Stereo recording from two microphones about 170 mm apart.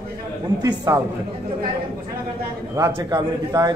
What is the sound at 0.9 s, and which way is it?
Speech, 20° right (ahead or behind).